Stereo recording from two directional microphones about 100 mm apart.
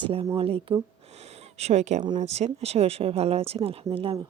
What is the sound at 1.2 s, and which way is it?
Speech, 90° right.